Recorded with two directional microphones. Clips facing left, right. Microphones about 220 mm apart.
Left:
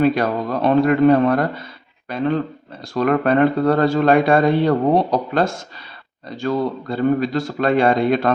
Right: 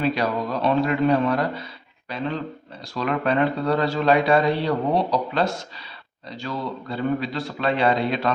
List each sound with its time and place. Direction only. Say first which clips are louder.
0.0 s speech: left 6 dB; 50° left (ahead or behind)